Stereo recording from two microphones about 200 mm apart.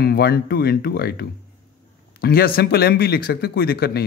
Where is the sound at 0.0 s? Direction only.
50° left (ahead or behind).